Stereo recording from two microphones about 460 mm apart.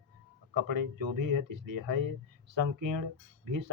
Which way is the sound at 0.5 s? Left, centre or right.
Right.